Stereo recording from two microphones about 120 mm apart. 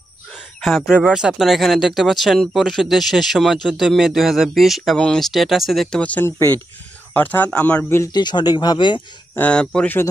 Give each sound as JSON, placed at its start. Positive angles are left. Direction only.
{"t": 0.6, "sound": "speech", "side_deg": 0}
{"t": 8.0, "sound": "speech", "side_deg": 35}
{"t": 9.3, "sound": "speech", "side_deg": 10}